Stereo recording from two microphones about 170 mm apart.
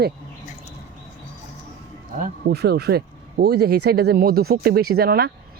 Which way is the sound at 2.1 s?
60° right (ahead or behind).